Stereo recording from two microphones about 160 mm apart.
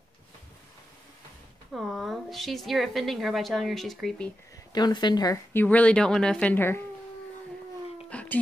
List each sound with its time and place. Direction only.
1.7 s a woman's voice: centre (ahead or behind)
4.7 s a woman's voice: 25° left (ahead or behind)
5.5 s speech: 10° left (ahead or behind)
8.1 s a sound: 10° left (ahead or behind)